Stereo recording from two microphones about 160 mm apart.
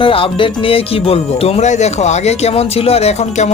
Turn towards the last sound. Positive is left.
turn(degrees=40)  # may be behind; listen again after turning